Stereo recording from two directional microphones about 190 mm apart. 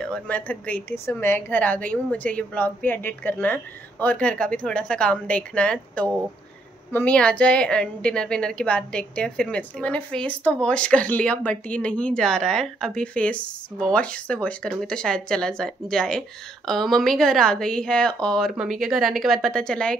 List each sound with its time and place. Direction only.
0.0 s a woman's voice: 5° left (ahead or behind)